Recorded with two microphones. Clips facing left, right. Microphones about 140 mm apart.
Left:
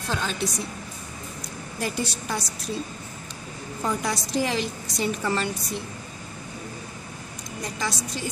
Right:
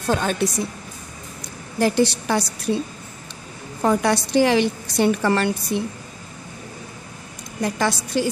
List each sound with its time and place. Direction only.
0.1 s a woman's voice: 55° right (ahead or behind)
1.8 s a woman's voice: 80° right
3.8 s a woman's voice: 65° right (ahead or behind)
7.6 s a woman's voice: 65° right (ahead or behind)